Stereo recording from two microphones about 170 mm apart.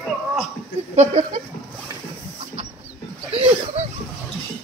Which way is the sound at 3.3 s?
40° right (ahead or behind).